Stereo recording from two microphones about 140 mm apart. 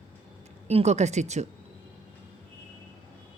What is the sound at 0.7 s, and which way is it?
Speech, 50° right (ahead or behind).